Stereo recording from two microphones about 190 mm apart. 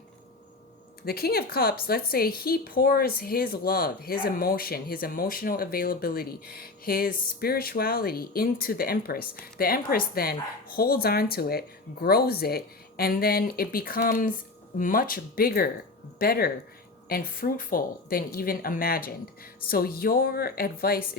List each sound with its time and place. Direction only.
1.0 s a woman's voice: 55° left (ahead or behind)